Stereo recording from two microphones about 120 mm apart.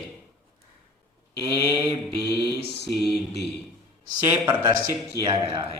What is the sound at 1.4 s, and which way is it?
Mantra, 40° right (ahead or behind).